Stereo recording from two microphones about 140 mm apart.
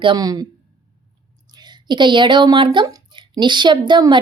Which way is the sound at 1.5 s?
30° right (ahead or behind).